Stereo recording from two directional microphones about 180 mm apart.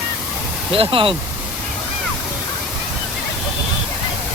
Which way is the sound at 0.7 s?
30° right (ahead or behind).